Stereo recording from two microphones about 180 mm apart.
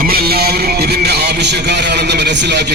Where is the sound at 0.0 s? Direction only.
55° right (ahead or behind).